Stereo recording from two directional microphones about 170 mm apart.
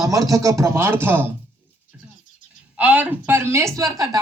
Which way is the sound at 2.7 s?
10° right (ahead or behind).